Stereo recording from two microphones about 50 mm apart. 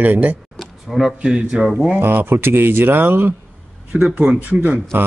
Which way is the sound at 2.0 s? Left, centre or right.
Right.